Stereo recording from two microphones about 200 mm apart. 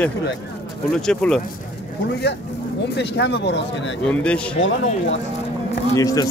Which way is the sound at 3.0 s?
60° left (ahead or behind).